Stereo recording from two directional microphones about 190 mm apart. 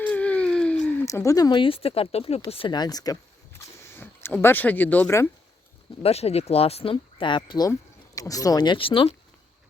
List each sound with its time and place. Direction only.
0.0 s a sound: 10° left (ahead or behind); by 2.4 s 30° left (ahead or behind)
2.4 s speech: 25° left (ahead or behind); by 5.3 s 10° left (ahead or behind)
6.0 s speech: 30° left (ahead or behind)